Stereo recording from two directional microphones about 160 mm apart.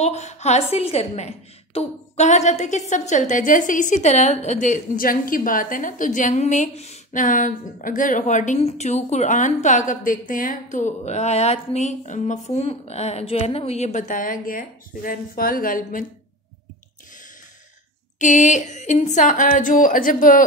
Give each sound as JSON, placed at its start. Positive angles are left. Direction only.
{"t": 0.0, "sound": "a woman's voice", "side_deg": 45}
{"t": 18.2, "sound": "a woman's voice", "side_deg": 50}